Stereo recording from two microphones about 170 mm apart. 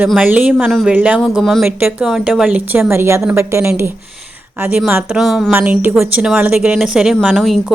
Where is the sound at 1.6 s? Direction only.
10° right (ahead or behind).